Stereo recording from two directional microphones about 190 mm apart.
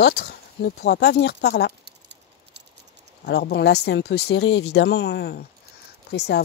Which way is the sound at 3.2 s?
60° left (ahead or behind).